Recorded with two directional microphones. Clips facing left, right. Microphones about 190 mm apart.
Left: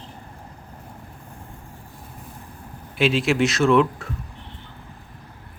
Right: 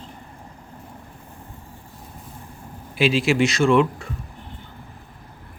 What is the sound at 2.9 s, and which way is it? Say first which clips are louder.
Speech: right 1 dB; centre (ahead or behind).